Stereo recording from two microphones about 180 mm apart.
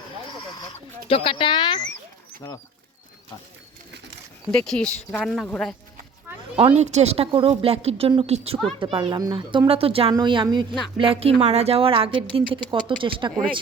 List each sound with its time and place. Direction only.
1.0 s speech: 30° left (ahead or behind)
2.4 s speech: 15° left (ahead or behind)
4.5 s speech: 5° left (ahead or behind)
6.6 s speech: 35° right (ahead or behind)